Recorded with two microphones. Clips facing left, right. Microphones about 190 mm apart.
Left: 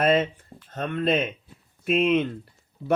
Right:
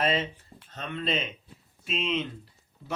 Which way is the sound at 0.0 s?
50° left (ahead or behind).